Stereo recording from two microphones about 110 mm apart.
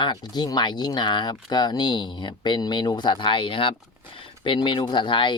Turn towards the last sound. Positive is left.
turn(degrees=50)  # may be behind; listen again after turning